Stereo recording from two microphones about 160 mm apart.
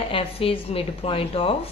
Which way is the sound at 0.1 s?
35° left (ahead or behind).